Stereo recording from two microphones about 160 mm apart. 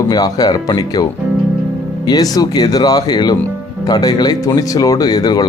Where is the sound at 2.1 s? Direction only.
25° left (ahead or behind).